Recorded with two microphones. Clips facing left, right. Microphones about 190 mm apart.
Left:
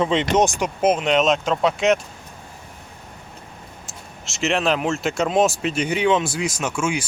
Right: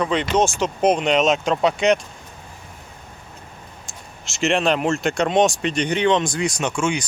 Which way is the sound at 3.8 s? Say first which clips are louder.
Left 1 dB; centre (ahead or behind).